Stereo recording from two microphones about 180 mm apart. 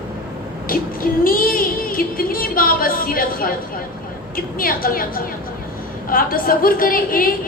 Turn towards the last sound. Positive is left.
turn(degrees=55)  # may be behind; listen again after turning